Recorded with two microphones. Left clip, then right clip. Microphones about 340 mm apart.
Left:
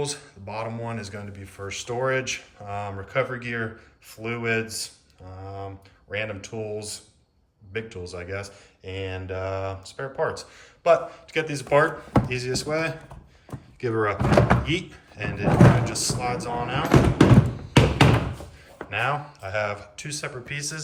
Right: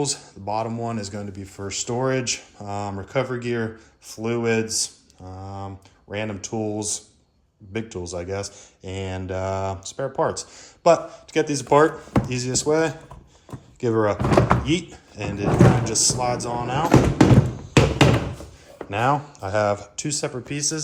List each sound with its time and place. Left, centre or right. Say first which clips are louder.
0.0 s speech: right 4 dB; centre
6.1 s speech: right 1 dB; centre
14.2 s speech: right 1 dB; centre
14.6 s speech: right 3 dB; centre
17.2 s music: right 1 dB; centre
18.9 s speech: right 4 dB; centre